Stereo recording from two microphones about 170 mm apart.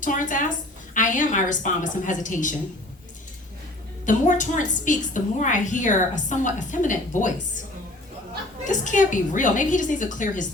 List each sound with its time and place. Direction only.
0.0 s a woman's voice: 50° left (ahead or behind)
4.0 s a woman's voice: 50° left (ahead or behind)
8.6 s a woman's voice: 50° left (ahead or behind)